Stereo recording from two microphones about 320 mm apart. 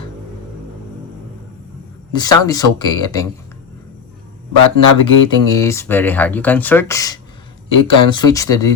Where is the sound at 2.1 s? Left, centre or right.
Centre.